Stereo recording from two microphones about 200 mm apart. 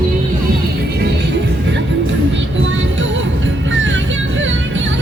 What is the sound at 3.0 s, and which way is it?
Music, 70° right (ahead or behind).